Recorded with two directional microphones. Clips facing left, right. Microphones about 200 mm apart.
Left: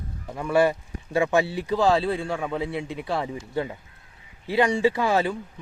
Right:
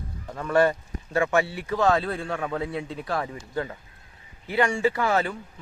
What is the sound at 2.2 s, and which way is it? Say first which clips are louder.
Speech: left 1 dB; 10° left (ahead or behind).